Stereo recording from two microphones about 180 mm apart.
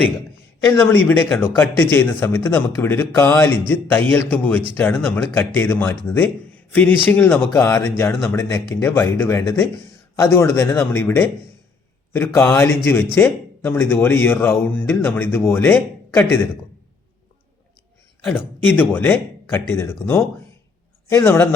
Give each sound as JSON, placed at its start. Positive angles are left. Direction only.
{"t": 0.7, "sound": "speech", "side_deg": 15}
{"t": 18.7, "sound": "speech", "side_deg": 10}
{"t": 21.1, "sound": "speech", "side_deg": 15}